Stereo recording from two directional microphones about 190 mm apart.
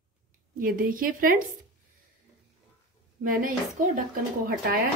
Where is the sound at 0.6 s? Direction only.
50° right (ahead or behind).